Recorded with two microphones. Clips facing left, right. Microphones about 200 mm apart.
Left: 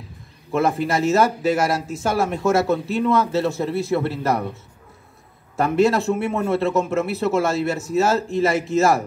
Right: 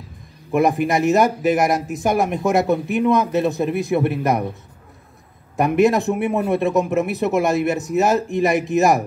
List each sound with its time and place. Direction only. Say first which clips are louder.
0.5 s speech: right 3 dB; 15° right (ahead or behind)
5.6 s speech: right 2 dB; 15° right (ahead or behind)